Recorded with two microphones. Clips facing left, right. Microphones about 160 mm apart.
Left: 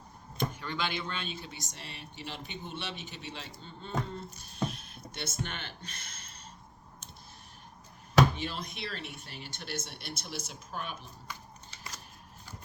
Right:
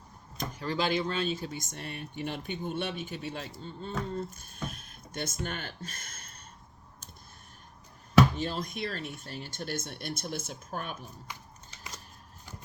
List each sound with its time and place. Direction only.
0.3 s speech: 35° right (ahead or behind)
8.4 s speech: 45° right (ahead or behind)